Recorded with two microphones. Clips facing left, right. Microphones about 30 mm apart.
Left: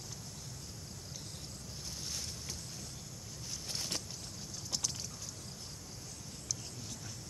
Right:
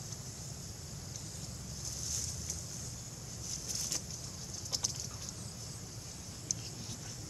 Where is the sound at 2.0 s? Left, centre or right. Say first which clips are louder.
Even; left.